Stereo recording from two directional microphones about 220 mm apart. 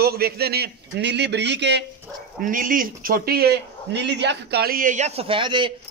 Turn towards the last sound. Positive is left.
turn(degrees=-20)  # may be behind; listen again after turning